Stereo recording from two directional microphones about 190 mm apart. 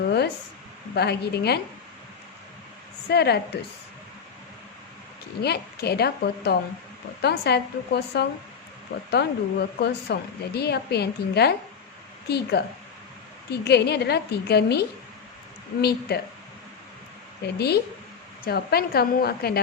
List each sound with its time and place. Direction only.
0.9 s speech: 60° left (ahead or behind)
3.1 s speech: 60° left (ahead or behind)
5.4 s speech: 60° left (ahead or behind)
17.4 s speech: 60° left (ahead or behind)